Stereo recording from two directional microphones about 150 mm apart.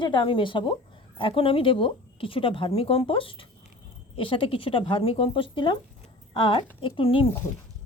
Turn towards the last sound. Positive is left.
turn(degrees=35)  # may be behind; listen again after turning